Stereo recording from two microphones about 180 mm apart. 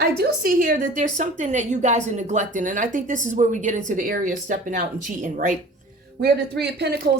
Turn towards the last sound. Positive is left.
turn(degrees=-65)  # may be behind; listen again after turning